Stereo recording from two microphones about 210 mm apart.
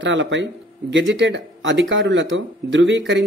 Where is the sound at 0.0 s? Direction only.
65° right (ahead or behind).